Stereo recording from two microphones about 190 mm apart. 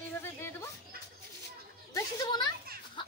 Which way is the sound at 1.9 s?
20° left (ahead or behind).